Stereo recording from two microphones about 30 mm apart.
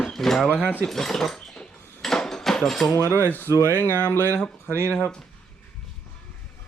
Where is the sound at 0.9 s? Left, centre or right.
Centre.